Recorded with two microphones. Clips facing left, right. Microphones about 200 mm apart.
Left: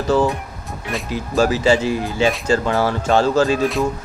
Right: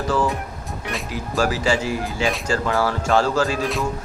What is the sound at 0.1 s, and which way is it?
Speech, 25° left (ahead or behind).